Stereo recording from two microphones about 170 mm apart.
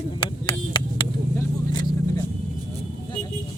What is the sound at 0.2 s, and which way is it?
Vehicle, 30° left (ahead or behind).